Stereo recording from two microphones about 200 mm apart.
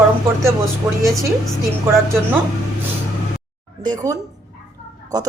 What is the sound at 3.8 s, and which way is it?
Speech, 20° right (ahead or behind).